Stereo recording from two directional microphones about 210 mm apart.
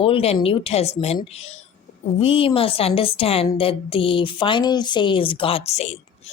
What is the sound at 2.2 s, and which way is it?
Speech, 25° left (ahead or behind).